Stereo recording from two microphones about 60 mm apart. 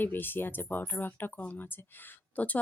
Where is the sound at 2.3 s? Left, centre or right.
Left.